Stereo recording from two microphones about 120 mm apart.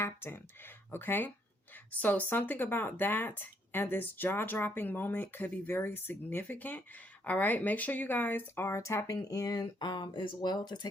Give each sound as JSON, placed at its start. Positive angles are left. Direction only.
{"t": 0.0, "sound": "speech", "side_deg": 20}